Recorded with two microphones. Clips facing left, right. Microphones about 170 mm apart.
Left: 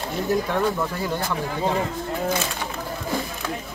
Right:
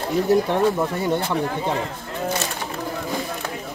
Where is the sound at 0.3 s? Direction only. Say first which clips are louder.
Right 4 dB; 25° right (ahead or behind).